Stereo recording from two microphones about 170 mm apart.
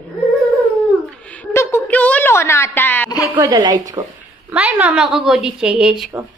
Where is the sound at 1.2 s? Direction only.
10° left (ahead or behind).